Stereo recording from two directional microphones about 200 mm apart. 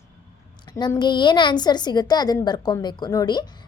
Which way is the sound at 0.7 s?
20° left (ahead or behind).